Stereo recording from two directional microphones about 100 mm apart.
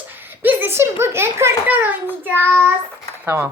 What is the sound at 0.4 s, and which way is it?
A child's voice, 20° right (ahead or behind).